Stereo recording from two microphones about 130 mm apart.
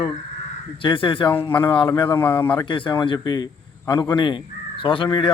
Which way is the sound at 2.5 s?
40° left (ahead or behind).